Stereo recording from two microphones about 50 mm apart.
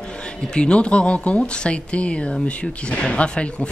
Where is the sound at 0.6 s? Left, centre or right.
Left.